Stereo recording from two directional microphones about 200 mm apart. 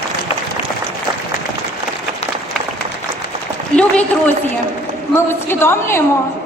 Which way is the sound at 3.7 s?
5° left (ahead or behind).